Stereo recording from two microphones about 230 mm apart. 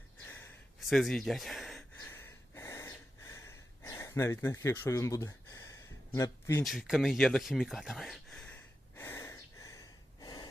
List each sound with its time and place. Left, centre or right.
0.8 s speech: centre
2.0 s gasp: centre
6.1 s speech: centre
6.7 s speech: centre
9.0 s gasp: centre